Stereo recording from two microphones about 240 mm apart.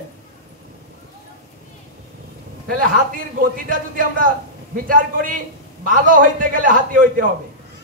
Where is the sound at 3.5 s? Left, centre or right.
Right.